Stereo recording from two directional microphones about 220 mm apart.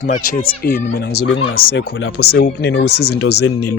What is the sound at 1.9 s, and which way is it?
Speech, 55° left (ahead or behind).